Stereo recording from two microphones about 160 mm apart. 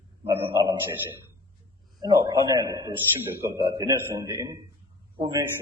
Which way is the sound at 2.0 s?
25° right (ahead or behind).